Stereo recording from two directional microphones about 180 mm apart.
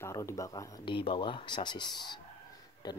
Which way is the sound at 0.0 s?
15° left (ahead or behind).